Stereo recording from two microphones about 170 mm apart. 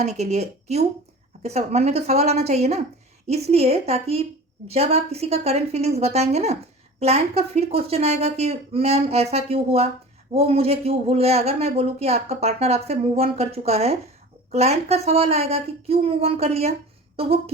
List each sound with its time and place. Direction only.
0.0 s speech: 40° right (ahead or behind)